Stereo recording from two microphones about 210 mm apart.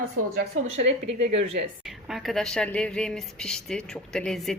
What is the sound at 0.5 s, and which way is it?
Speech, 80° right.